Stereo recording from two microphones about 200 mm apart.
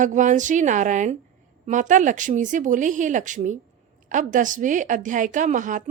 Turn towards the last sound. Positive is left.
turn(degrees=-40)  # may be behind; listen again after turning